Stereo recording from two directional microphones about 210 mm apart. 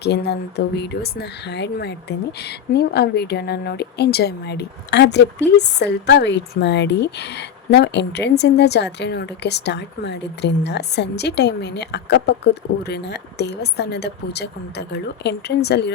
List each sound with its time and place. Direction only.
0.0 s speech: 50° left (ahead or behind)